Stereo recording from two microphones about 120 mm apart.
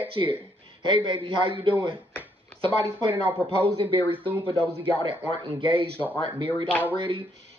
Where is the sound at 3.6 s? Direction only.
50° right (ahead or behind).